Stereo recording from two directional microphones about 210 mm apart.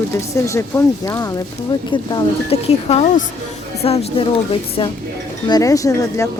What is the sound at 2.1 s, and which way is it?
Speech, 30° left (ahead or behind).